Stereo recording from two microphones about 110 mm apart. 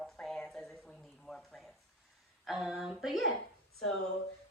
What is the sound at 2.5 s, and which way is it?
Speech, 5° right (ahead or behind).